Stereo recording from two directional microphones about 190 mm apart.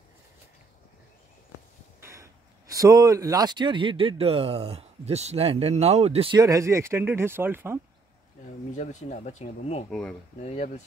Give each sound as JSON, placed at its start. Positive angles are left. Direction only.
{"t": 2.0, "sound": "a sound", "side_deg": -15}
{"t": 2.7, "sound": "speech", "side_deg": -15}
{"t": 8.7, "sound": "speech", "side_deg": 40}
{"t": 9.8, "sound": "speech", "side_deg": 5}
{"t": 10.4, "sound": "speech", "side_deg": 35}